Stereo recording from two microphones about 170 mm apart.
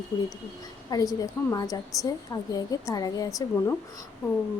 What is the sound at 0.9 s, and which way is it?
A woman's voice, 20° left (ahead or behind).